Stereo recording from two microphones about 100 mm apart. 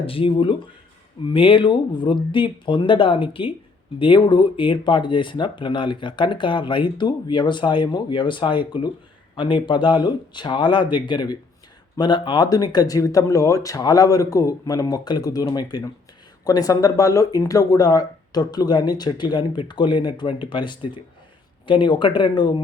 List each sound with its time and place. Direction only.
0.0 s speech: 65° left (ahead or behind); by 22.6 s 50° left (ahead or behind)